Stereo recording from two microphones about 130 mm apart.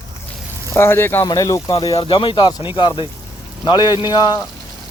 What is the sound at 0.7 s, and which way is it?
Speech, 20° left (ahead or behind).